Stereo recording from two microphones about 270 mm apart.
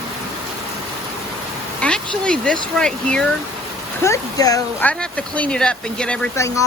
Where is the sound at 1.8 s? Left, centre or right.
Centre.